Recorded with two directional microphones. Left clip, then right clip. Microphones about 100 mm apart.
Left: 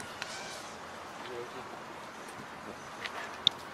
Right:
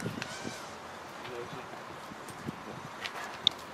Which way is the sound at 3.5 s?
Centre (ahead or behind).